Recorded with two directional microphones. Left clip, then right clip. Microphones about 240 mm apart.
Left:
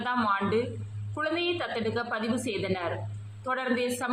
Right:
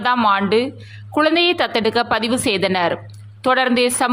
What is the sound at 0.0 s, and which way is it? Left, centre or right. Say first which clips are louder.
Speech: right 11 dB; right.